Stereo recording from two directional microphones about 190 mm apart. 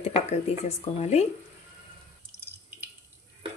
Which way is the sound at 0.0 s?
35° left (ahead or behind).